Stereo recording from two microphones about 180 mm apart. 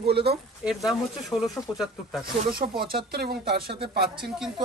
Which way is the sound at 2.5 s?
55° right (ahead or behind).